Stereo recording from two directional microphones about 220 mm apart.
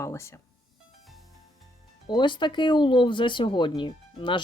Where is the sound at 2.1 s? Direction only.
20° left (ahead or behind).